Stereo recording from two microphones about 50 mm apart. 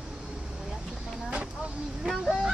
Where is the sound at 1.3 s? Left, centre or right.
Right.